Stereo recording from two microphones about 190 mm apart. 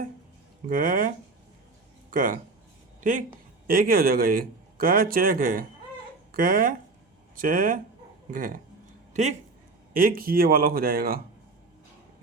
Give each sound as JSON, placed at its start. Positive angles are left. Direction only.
{"t": 0.7, "sound": "speech", "side_deg": -45}
{"t": 9.9, "sound": "speech", "side_deg": -50}